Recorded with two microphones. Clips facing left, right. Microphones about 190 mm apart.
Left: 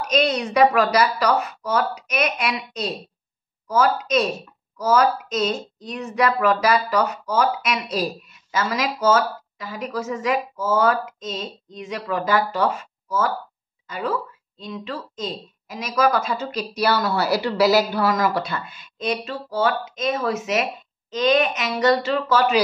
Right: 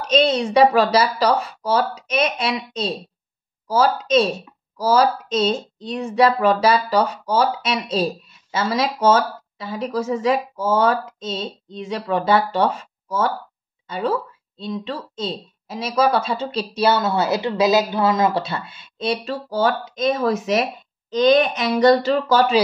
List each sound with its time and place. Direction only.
0.1 s a woman's voice: 30° right (ahead or behind)